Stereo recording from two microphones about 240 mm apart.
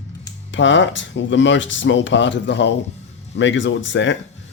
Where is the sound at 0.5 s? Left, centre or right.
Left.